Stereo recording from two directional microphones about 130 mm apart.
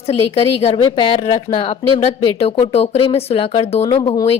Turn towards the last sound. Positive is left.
turn(degrees=35)  # may be behind; listen again after turning